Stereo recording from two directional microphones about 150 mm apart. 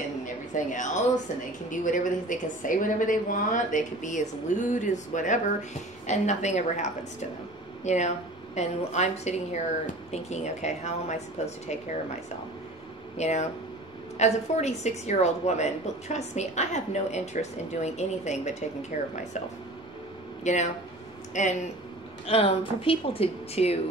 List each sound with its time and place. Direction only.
0.7 s a woman's voice: 55° left (ahead or behind)
13.2 s a woman's voice: 50° left (ahead or behind)
20.4 s a woman's voice: 50° left (ahead or behind)
22.2 s a woman's voice: 40° left (ahead or behind)